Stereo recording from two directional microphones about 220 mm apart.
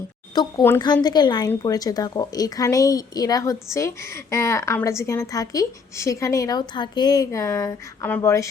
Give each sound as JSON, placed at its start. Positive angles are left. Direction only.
{"t": 0.3, "sound": "a woman's voice", "side_deg": 15}